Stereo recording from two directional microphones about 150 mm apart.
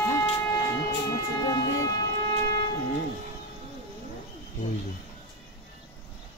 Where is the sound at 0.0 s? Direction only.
15° left (ahead or behind).